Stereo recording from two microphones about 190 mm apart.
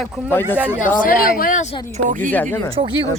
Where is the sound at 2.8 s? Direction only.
30° right (ahead or behind).